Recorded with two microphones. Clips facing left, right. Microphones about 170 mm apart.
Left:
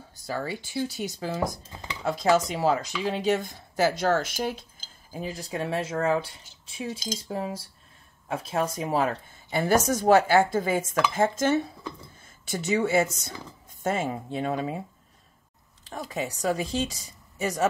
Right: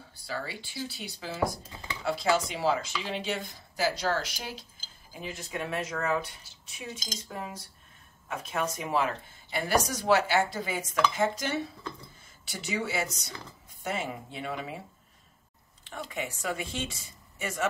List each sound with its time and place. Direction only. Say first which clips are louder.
0.3 s speech: left 6 dB; 45° left (ahead or behind)
1.4 s speech: left 1 dB; 20° left (ahead or behind)
2.0 s speech: left 5 dB; 45° left (ahead or behind)
5.1 s speech: left 5 dB; 35° left (ahead or behind)
15.8 s speech: left 4 dB; 40° left (ahead or behind)